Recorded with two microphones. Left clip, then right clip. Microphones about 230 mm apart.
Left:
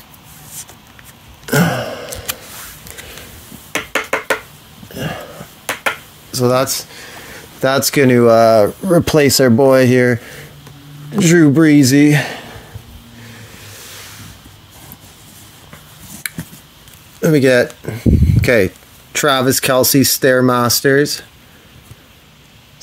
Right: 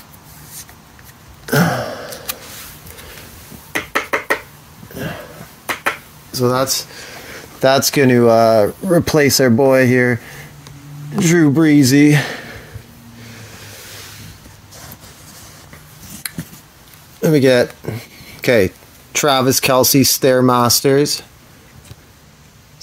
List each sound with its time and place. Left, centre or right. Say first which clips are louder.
1.4 s sigh: left 1 dB; centre
6.3 s speech: left 3 dB; left
7.6 s speech: even; centre
16.2 s cutlery: left 3 dB; centre
17.2 s speech: left 1 dB; centre